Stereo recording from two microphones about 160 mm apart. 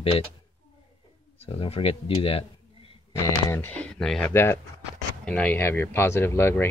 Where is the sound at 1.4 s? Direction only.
35° left (ahead or behind).